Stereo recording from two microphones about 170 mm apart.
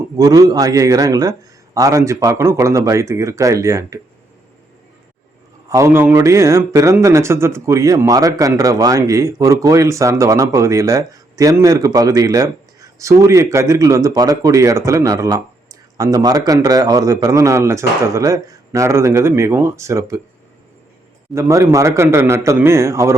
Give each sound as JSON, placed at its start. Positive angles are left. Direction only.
{"t": 0.2, "sound": "speech", "side_deg": -20}
{"t": 5.6, "sound": "speech", "side_deg": -15}
{"t": 21.3, "sound": "speech", "side_deg": -15}